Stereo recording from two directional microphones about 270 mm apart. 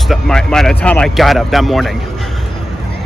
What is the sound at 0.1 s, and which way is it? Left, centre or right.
Speech, centre.